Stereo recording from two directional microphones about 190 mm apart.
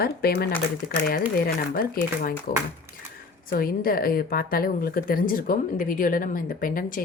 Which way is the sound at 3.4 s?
50° left (ahead or behind).